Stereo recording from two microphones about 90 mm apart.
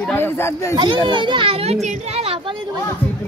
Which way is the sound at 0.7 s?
65° right (ahead or behind).